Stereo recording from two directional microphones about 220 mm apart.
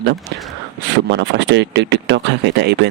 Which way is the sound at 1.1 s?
55° right (ahead or behind).